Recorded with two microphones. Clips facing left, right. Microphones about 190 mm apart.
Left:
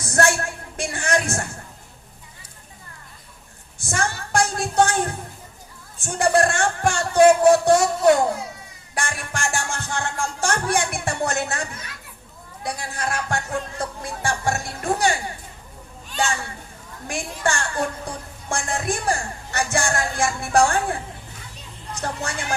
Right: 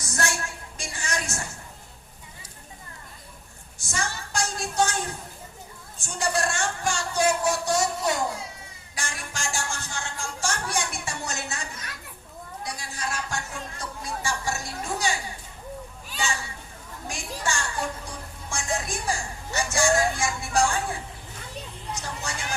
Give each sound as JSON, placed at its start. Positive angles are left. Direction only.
{"t": 0.0, "sound": "music", "side_deg": 55}
{"t": 3.8, "sound": "a sound", "side_deg": 55}
{"t": 9.0, "sound": "music", "side_deg": 55}
{"t": 17.1, "sound": "music", "side_deg": 55}
{"t": 21.9, "sound": "vehicle", "side_deg": 55}